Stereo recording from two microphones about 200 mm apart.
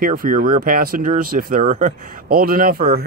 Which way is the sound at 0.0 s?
45° right (ahead or behind).